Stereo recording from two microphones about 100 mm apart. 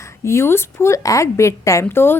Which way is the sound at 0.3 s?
25° left (ahead or behind).